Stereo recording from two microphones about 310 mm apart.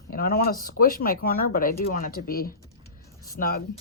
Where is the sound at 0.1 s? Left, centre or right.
Left.